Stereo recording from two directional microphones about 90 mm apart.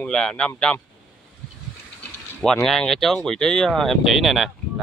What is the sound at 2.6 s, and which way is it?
Speech, 5° left (ahead or behind).